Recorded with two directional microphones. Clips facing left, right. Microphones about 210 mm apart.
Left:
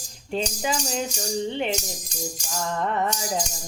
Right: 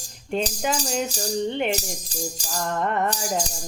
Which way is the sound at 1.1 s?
35° right (ahead or behind).